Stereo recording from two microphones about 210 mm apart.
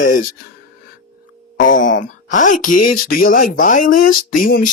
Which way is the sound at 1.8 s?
65° left (ahead or behind).